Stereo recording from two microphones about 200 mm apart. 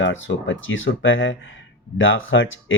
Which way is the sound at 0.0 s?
70° left (ahead or behind).